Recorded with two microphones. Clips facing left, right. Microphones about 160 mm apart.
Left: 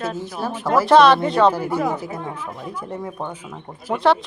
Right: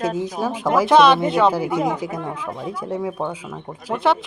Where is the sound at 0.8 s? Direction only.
Centre (ahead or behind).